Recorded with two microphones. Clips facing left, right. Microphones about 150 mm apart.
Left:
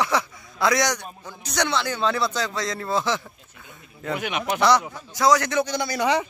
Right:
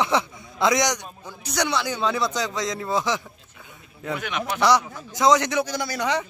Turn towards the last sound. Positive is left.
turn(degrees=5)  # may be behind; listen again after turning